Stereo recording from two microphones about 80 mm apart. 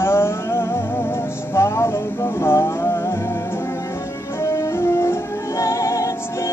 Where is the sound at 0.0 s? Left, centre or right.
Left.